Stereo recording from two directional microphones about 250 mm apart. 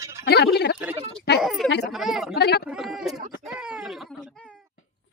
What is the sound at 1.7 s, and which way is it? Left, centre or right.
Speech, left.